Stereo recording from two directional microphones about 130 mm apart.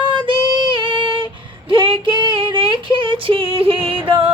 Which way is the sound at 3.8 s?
45° right (ahead or behind).